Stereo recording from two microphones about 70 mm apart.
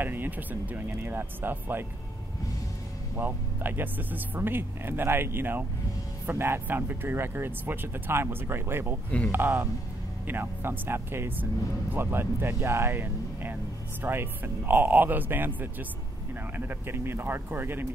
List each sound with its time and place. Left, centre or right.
0.0 s speech: right
3.2 s speech: right